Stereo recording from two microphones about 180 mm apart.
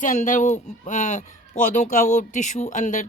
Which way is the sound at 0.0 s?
45° left (ahead or behind).